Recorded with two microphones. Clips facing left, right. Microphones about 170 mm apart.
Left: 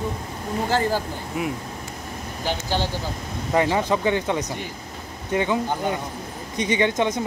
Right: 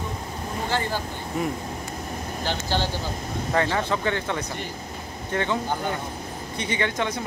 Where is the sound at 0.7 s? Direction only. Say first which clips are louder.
Left 5 dB; 40° left (ahead or behind).